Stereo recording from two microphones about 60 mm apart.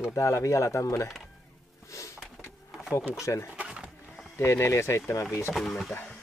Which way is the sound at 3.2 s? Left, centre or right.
Left.